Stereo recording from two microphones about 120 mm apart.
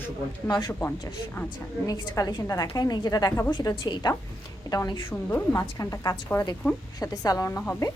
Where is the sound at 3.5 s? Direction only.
40° left (ahead or behind).